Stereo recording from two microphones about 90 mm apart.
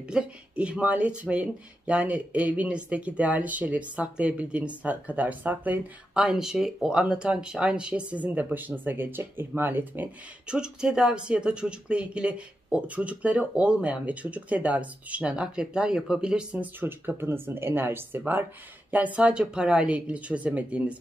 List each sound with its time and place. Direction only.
0.0 s speech: 10° right (ahead or behind)
10.4 s speech: 10° right (ahead or behind)
16.8 s speech: 25° right (ahead or behind)